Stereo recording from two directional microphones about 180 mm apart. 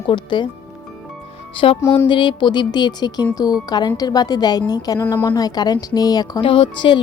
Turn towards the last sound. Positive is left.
turn(degrees=30)  # may be behind; listen again after turning